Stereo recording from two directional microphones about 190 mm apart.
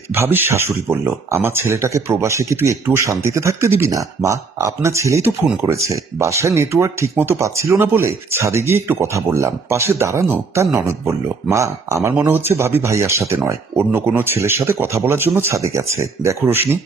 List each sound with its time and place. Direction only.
0.1 s speech: 10° right (ahead or behind)